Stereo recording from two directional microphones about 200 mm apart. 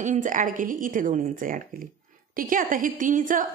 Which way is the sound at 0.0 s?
40° right (ahead or behind).